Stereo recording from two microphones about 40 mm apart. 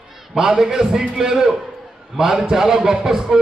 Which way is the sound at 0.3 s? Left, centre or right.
Centre.